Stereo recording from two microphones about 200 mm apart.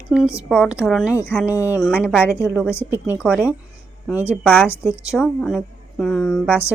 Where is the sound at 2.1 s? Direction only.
10° left (ahead or behind).